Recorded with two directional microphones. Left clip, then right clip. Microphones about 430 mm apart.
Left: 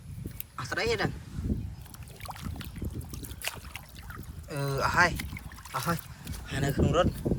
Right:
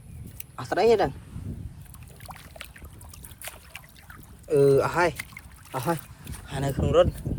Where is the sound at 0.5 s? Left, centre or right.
Centre.